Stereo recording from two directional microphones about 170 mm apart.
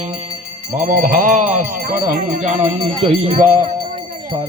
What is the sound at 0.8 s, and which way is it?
Speech, 55° right (ahead or behind).